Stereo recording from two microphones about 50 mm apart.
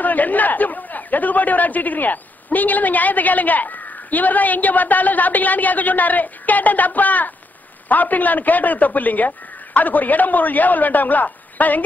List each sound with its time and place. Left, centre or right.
0.0 s a man's voice: left